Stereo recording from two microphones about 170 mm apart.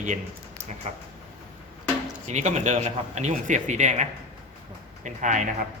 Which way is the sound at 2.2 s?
45° right (ahead or behind).